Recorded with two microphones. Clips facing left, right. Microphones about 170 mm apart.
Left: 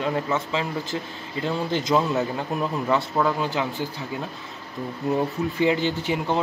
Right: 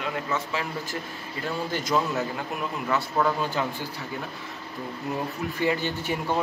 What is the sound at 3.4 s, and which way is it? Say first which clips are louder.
Speech: left 2 dB; 15° left (ahead or behind).